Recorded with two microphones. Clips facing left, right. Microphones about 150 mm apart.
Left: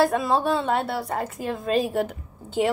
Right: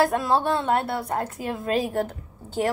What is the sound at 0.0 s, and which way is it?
A woman's voice, centre (ahead or behind).